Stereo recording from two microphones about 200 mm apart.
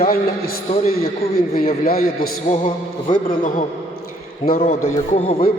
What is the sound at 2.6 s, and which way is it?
A man's voice, 45° left (ahead or behind).